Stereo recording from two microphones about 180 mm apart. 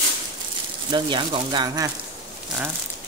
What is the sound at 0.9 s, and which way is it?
Speech, 25° right (ahead or behind).